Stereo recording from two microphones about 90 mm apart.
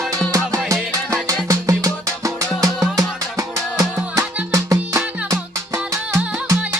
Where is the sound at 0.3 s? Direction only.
35° right (ahead or behind).